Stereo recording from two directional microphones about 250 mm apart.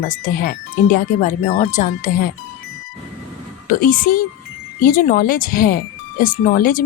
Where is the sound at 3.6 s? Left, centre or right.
Left.